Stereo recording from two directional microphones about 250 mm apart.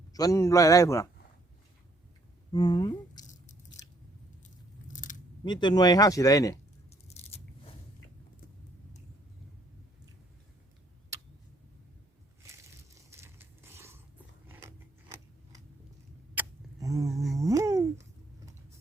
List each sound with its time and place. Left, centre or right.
0.1 s speech: centre
2.5 s speech: centre
3.2 s biting: left
4.9 s a sound: left
5.5 s speech: centre
6.9 s biting: left
12.4 s a sound: centre
14.4 s biting: centre
16.3 s a sound: centre
17.3 s dog: centre